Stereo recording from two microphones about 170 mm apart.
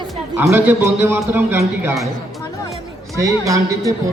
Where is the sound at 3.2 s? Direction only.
20° right (ahead or behind).